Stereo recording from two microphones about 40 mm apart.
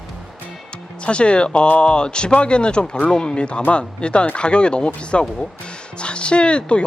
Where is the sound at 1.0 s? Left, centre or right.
Left.